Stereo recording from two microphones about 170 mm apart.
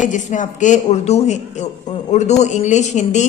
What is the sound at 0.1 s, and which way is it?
A woman's voice, 45° left (ahead or behind).